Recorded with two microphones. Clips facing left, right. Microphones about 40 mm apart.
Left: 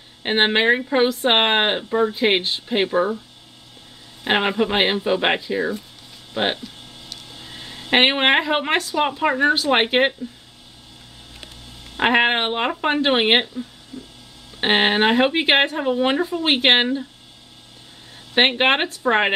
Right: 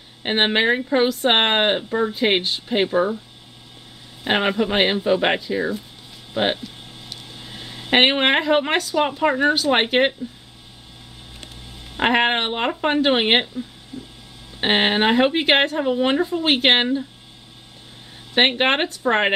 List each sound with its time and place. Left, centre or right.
0.2 s speech: centre
4.2 s speech: centre
12.0 s speech: centre
13.9 s vehicle: right
14.6 s speech: centre
18.3 s speech: centre